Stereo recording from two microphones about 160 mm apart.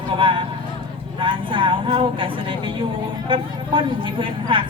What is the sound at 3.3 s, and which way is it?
Speech, 30° right (ahead or behind).